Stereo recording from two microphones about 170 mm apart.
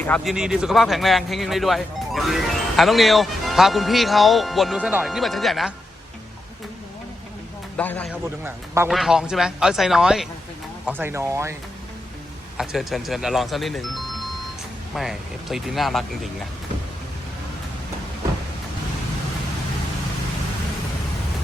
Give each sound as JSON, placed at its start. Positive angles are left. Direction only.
{"t": 0.3, "sound": "speech", "side_deg": -5}
{"t": 7.8, "sound": "a man's voice", "side_deg": 10}
{"t": 8.4, "sound": "speech", "side_deg": -15}
{"t": 8.9, "sound": "speech", "side_deg": 0}
{"t": 10.8, "sound": "speech", "side_deg": -10}
{"t": 12.5, "sound": "speech", "side_deg": 0}